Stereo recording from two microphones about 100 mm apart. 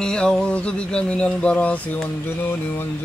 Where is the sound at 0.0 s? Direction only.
5° left (ahead or behind).